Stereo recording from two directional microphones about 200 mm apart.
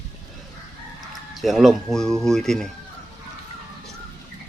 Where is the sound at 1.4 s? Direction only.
Centre (ahead or behind).